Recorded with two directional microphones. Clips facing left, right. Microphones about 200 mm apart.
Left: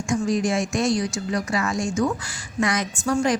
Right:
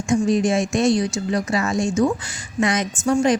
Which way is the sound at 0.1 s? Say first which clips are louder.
Right 4 dB; 25° right (ahead or behind).